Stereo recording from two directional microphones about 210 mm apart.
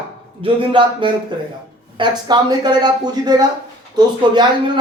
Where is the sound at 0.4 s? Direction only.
25° right (ahead or behind).